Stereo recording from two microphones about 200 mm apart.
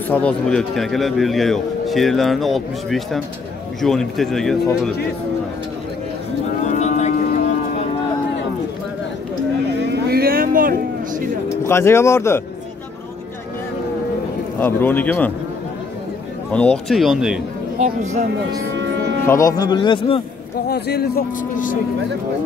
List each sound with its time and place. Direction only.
0.1 s a man's voice: 5° left (ahead or behind)
6.6 s cattle: 35° left (ahead or behind)
10.1 s a sound: 50° right (ahead or behind)
11.6 s speech: 15° left (ahead or behind)
14.6 s speech: 10° left (ahead or behind)
16.5 s a man's voice: 5° left (ahead or behind)
17.7 s speech: 35° right (ahead or behind)
19.2 s a man's voice: 15° left (ahead or behind)
20.6 s speech: 55° left (ahead or behind)